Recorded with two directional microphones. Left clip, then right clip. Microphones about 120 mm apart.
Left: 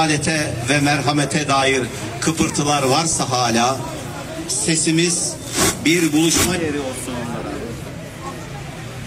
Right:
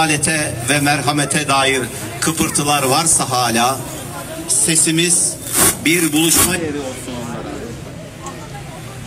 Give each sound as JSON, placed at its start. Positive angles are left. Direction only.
{"t": 0.0, "sound": "a man's voice", "side_deg": -20}